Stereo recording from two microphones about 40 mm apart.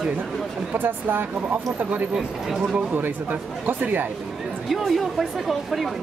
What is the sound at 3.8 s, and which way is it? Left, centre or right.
Speech, right.